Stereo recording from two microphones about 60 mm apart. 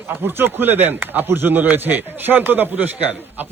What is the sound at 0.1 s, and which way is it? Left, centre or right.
A man's voice, right.